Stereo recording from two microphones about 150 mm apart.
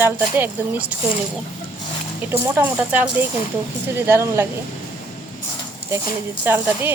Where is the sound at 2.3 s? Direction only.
15° right (ahead or behind).